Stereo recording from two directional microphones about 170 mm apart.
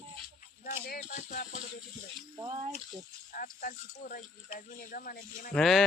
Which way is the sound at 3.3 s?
55° left (ahead or behind).